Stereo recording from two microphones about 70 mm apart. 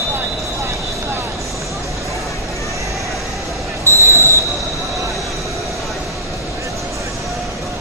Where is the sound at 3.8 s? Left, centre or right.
Right.